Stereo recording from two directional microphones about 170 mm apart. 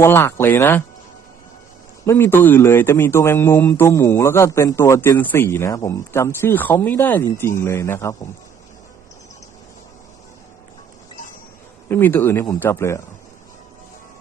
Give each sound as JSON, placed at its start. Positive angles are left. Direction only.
{"t": 0.0, "sound": "speech", "side_deg": 15}
{"t": 2.0, "sound": "speech", "side_deg": 15}
{"t": 11.9, "sound": "speech", "side_deg": 15}